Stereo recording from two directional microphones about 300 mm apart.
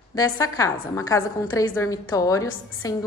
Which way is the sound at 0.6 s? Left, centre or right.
Centre.